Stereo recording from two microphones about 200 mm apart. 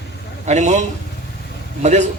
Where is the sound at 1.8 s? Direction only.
35° right (ahead or behind).